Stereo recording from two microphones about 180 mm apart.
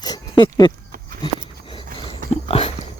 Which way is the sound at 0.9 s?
50° right (ahead or behind).